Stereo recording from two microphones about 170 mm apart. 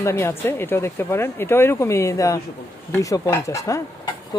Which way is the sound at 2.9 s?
20° left (ahead or behind).